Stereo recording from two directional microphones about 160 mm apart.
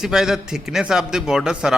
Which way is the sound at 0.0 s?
5° right (ahead or behind).